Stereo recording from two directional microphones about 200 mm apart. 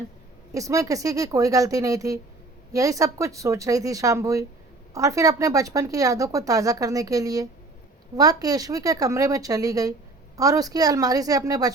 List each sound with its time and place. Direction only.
0.5 s speech: 15° right (ahead or behind)